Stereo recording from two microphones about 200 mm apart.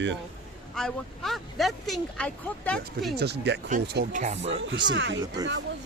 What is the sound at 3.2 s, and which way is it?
Speech, 55° right (ahead or behind).